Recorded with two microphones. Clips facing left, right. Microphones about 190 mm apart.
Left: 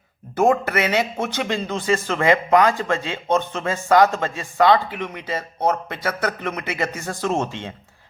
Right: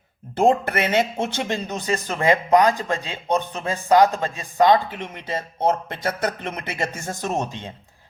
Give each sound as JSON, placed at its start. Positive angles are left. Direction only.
{"t": 0.4, "sound": "speech", "side_deg": -25}